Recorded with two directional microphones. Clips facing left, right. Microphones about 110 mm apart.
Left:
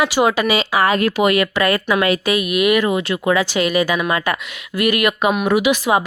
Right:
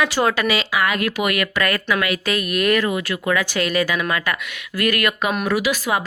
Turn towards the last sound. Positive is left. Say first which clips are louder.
# left 5 dB
turn(degrees=20)  # may be behind; listen again after turning